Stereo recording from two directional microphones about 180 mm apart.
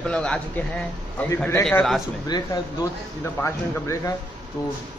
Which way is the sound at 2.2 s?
25° left (ahead or behind).